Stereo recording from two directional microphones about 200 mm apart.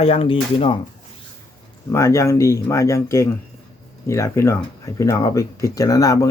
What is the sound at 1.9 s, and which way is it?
Speech, 15° left (ahead or behind).